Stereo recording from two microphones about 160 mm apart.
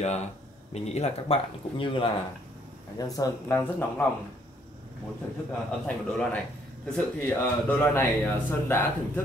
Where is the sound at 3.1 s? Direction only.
20° left (ahead or behind).